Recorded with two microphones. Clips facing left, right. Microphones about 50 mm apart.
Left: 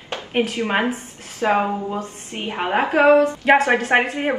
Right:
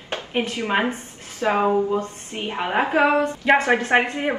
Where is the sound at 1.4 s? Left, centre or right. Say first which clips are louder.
Left 2 dB; left.